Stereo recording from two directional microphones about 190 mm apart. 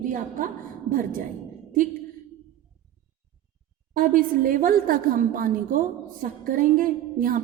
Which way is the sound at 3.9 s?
45° right (ahead or behind).